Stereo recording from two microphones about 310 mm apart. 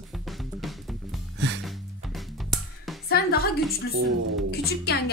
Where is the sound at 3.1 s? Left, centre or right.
Left.